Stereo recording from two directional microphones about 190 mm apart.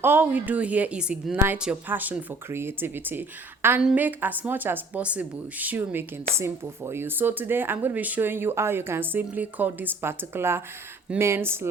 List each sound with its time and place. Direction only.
0.0 s a woman's voice: 10° right (ahead or behind)